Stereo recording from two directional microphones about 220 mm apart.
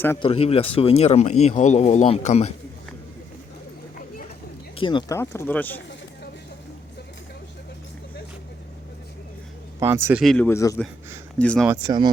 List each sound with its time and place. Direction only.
0.2 s speech: 25° left (ahead or behind)
4.8 s speech: 20° left (ahead or behind)
9.8 s speech: 10° right (ahead or behind); by 11.7 s 5° left (ahead or behind)
11.7 s speech: 20° right (ahead or behind)